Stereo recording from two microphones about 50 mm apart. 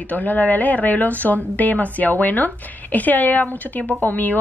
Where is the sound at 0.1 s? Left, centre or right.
Left.